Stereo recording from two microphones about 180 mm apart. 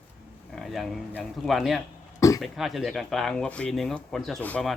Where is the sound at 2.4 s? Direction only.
Centre (ahead or behind).